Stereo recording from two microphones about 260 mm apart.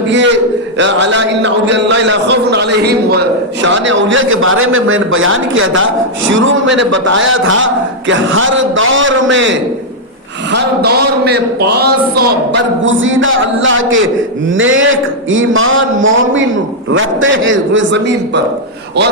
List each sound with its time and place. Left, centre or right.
0.8 s a man's voice: right